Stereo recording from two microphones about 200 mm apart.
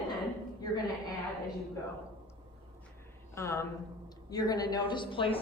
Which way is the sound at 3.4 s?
15° left (ahead or behind).